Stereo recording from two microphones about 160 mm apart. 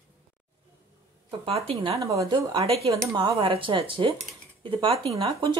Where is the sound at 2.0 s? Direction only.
20° right (ahead or behind); by 4.9 s 35° right (ahead or behind).